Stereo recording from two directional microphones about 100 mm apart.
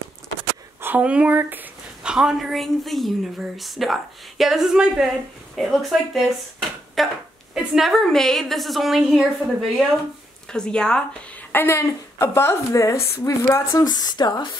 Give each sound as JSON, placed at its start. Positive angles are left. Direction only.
{"t": 0.7, "sound": "a sound", "side_deg": -20}
{"t": 2.1, "sound": "a woman's voice", "side_deg": -5}
{"t": 11.5, "sound": "a woman's voice", "side_deg": 25}